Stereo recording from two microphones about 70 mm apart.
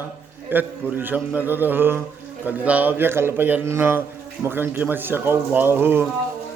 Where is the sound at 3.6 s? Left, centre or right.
Right.